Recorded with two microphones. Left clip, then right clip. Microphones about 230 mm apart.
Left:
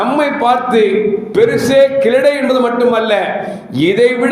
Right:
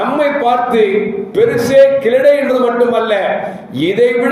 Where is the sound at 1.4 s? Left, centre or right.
Left.